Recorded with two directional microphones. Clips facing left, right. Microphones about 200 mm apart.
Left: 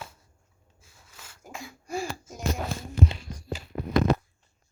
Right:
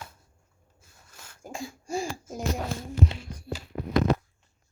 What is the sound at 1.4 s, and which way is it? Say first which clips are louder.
Speech: right 5 dB; 30° right (ahead or behind).